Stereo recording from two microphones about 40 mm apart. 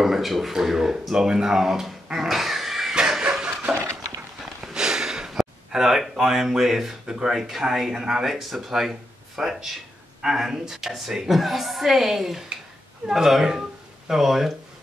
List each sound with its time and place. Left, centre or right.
0.0 s speech: centre
2.2 s dog: centre
3.0 s chicken: right
3.7 s a sound: centre
7.2 s speech: centre